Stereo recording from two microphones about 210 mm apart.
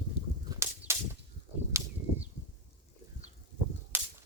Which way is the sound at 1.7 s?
15° right (ahead or behind).